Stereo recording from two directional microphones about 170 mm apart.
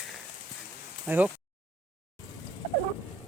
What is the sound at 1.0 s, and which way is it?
Speech, 10° right (ahead or behind).